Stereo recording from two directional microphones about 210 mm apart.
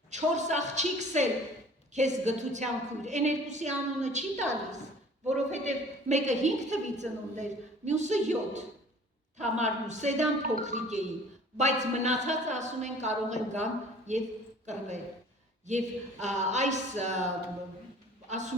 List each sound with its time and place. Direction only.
0.1 s a woman's voice: 35° right (ahead or behind)
16.2 s a woman's voice: 35° right (ahead or behind)
18.3 s a woman's voice: 35° right (ahead or behind)